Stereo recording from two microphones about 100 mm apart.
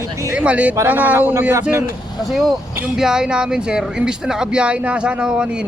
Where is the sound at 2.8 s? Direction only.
5° right (ahead or behind).